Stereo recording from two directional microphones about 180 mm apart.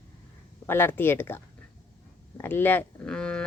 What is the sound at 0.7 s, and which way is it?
A woman's voice, 10° left (ahead or behind).